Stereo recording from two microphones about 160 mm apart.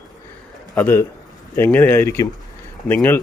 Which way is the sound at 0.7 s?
15° left (ahead or behind).